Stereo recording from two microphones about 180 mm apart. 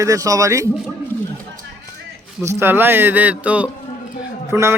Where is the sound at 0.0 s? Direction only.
20° right (ahead or behind).